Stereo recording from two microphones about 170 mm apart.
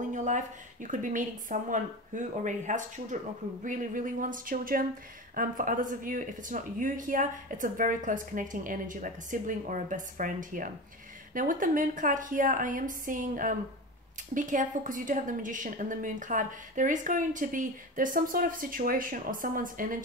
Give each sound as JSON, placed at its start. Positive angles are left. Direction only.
{"t": 0.1, "sound": "a woman's voice", "side_deg": -45}